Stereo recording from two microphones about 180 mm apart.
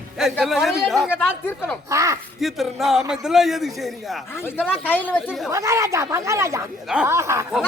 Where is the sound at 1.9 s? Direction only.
15° right (ahead or behind).